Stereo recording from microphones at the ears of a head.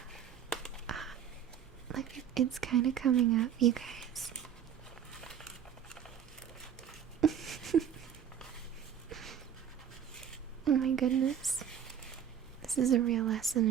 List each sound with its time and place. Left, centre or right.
1.9 s speech: right
7.2 s a sound: right
10.7 s speech: right
12.7 s speech: right